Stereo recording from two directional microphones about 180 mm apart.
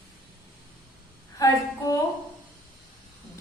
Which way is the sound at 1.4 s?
20° left (ahead or behind).